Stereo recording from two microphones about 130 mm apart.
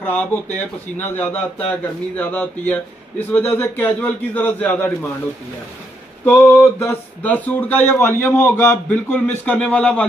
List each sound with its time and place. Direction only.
0.0 s a man's voice: 10° left (ahead or behind)
6.2 s a man's voice: 15° left (ahead or behind)
8.8 s a man's voice: 10° left (ahead or behind)